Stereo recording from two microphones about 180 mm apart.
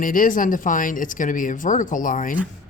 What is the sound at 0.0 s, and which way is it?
Speech, 50° left (ahead or behind).